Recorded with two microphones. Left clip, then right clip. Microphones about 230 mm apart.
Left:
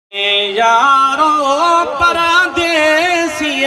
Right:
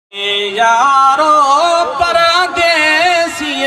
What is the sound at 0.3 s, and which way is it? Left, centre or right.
Music, right.